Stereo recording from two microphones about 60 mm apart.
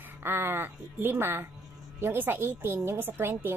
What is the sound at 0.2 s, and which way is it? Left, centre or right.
A woman's voice, right.